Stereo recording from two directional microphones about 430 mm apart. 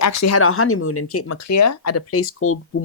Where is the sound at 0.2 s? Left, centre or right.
Left.